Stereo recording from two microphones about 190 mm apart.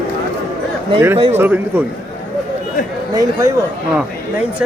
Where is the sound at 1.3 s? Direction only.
10° right (ahead or behind).